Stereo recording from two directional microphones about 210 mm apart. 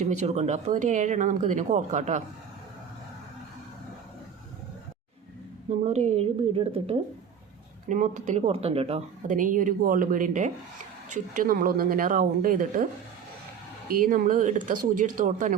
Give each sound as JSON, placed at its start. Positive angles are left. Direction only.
{"t": 0.0, "sound": "speech", "side_deg": -35}
{"t": 5.8, "sound": "a woman's voice", "side_deg": -30}
{"t": 7.9, "sound": "speech", "side_deg": -35}
{"t": 13.9, "sound": "speech", "side_deg": -40}